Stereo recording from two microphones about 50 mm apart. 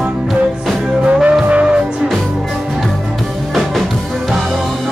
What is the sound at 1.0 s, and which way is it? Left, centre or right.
Music, right.